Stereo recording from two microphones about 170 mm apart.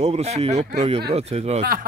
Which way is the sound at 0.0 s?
40° right (ahead or behind).